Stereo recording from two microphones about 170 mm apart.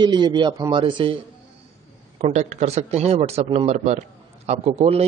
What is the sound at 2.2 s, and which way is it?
A man's voice, 45° right (ahead or behind).